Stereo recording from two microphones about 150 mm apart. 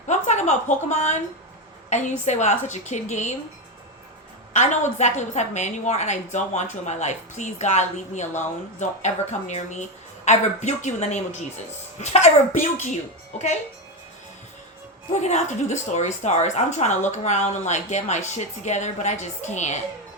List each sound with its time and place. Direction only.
0.1 s a woman's voice: 50° left (ahead or behind)
4.5 s a woman's voice: 50° left (ahead or behind)
13.3 s a woman's voice: 50° left (ahead or behind)
15.1 s a woman's voice: 50° left (ahead or behind)